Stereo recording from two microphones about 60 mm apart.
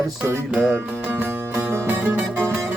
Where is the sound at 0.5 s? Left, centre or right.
Centre.